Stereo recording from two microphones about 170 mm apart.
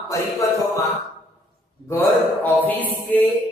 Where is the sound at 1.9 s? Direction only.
15° left (ahead or behind).